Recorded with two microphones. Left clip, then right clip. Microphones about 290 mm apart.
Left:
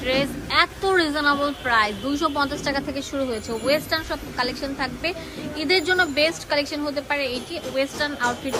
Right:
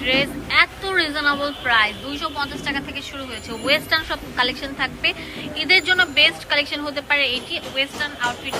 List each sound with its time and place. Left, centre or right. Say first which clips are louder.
0.0 s speech: right 3 dB; centre